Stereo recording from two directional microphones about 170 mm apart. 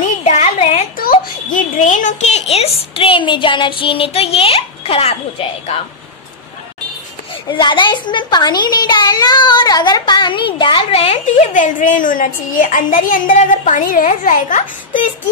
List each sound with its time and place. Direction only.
0.2 s a sound: 40° left (ahead or behind)
0.9 s a child's voice: 55° left (ahead or behind); by 5.8 s 35° left (ahead or behind)
7.4 s speech: 30° left (ahead or behind); by 15.0 s 50° left (ahead or behind)